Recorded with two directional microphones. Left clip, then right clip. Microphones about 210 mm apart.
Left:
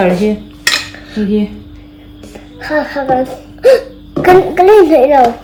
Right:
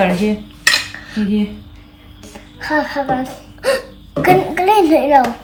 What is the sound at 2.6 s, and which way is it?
Speech, 10° right (ahead or behind).